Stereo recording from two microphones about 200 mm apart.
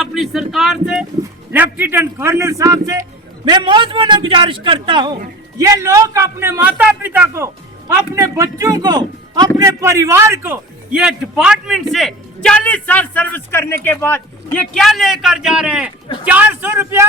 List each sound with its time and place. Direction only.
0.0 s a man's voice: centre (ahead or behind)